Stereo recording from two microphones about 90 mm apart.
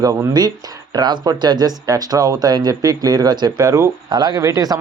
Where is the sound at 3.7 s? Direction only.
30° right (ahead or behind).